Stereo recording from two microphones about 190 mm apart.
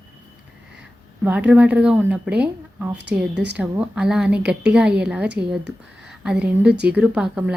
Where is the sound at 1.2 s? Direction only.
5° right (ahead or behind).